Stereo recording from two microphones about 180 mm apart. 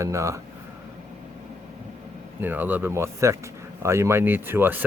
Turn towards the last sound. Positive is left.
turn(degrees=-10)  # may be behind; listen again after turning